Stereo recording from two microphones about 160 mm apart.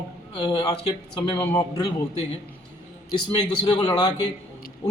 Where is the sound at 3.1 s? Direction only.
30° left (ahead or behind).